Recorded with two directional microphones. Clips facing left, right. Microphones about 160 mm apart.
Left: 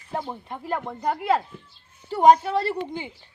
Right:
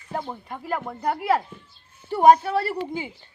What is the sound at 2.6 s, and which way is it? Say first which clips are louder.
Speech: even; 10° right (ahead or behind).